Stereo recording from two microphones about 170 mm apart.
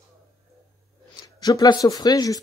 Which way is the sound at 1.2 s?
20° left (ahead or behind).